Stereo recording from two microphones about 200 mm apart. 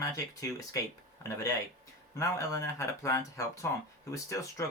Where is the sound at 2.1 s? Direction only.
15° left (ahead or behind).